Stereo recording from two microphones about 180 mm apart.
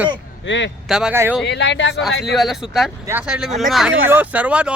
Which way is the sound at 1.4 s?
70° left (ahead or behind).